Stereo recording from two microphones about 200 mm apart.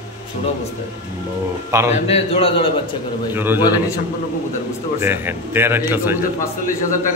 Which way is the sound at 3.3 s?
10° right (ahead or behind).